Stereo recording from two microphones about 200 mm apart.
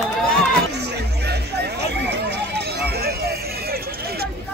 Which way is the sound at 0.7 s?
55° right (ahead or behind).